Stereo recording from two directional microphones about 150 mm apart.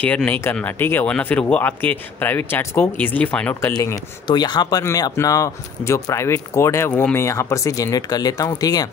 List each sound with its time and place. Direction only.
0.0 s speech: 10° left (ahead or behind)
3.8 s speech: 25° left (ahead or behind)